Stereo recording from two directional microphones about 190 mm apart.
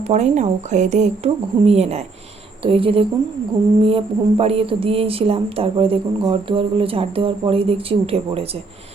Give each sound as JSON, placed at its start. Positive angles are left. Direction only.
{"t": 0.1, "sound": "speech", "side_deg": -35}